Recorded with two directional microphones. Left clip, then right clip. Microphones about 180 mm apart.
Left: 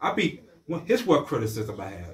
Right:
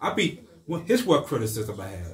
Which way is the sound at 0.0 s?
15° right (ahead or behind).